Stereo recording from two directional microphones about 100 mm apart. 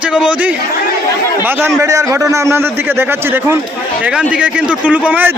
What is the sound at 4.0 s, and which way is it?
A man's voice, 10° right (ahead or behind).